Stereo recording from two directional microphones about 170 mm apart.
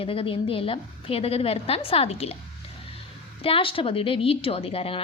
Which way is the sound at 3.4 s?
30° left (ahead or behind).